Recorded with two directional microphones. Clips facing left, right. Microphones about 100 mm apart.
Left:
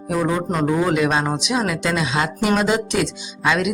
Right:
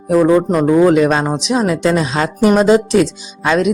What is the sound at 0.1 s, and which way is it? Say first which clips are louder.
Speech: right 10 dB; 40° right (ahead or behind).